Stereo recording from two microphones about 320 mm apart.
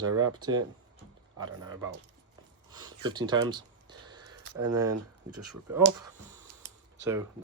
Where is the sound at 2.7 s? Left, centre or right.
Centre.